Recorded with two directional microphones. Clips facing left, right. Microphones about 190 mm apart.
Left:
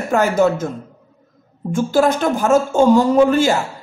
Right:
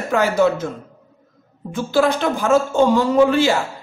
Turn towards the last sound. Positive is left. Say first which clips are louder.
# left 1 dB
turn(degrees=45)  # may be behind; listen again after turning